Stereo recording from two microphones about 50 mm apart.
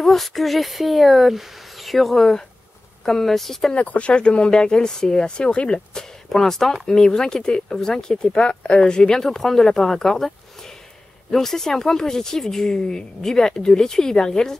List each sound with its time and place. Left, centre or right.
0.0 s speech: centre
3.7 s speech: left
6.2 s speech: centre